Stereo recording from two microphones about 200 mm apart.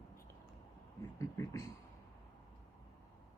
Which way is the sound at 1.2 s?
15° left (ahead or behind).